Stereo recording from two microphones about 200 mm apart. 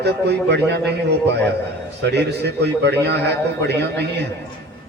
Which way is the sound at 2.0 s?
60° right (ahead or behind).